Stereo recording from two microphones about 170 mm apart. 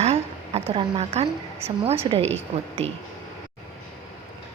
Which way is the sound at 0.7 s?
35° right (ahead or behind).